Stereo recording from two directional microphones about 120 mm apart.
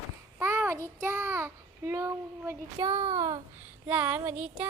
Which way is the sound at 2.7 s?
40° right (ahead or behind).